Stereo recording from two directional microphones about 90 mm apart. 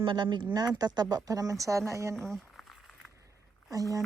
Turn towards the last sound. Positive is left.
turn(degrees=-40)  # may be behind; listen again after turning